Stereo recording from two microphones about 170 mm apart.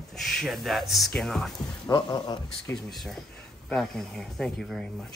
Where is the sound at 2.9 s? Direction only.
Centre (ahead or behind).